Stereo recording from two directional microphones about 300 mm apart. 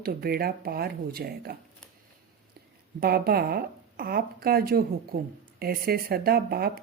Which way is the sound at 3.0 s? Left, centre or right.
Right.